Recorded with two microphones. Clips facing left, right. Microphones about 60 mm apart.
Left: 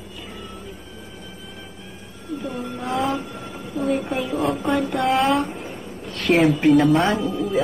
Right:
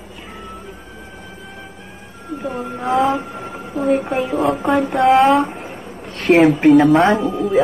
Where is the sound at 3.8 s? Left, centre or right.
Centre.